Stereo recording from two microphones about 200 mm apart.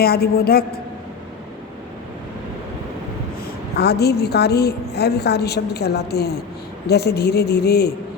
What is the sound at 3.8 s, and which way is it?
A woman's voice, 55° left (ahead or behind).